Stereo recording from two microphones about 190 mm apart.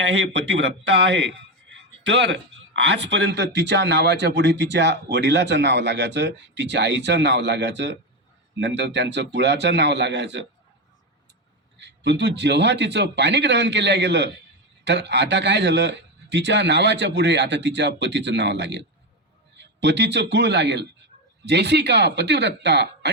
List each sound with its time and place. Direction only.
0.0 s speech: 70° right (ahead or behind)
2.0 s speech: 70° right (ahead or behind)
11.8 s a man's voice: 60° right (ahead or behind)